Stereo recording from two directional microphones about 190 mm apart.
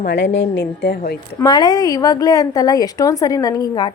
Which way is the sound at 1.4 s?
20° left (ahead or behind).